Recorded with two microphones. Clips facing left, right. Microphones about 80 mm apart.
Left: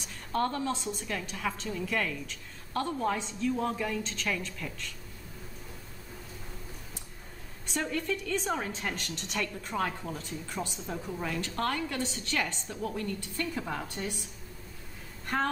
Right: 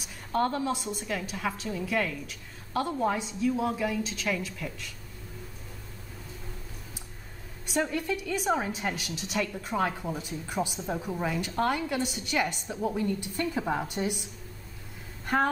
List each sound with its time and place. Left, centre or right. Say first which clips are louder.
0.0 s a woman's voice: right 3 dB; centre
7.6 s a woman's voice: right 3 dB; centre
15.2 s speech: right 4 dB; centre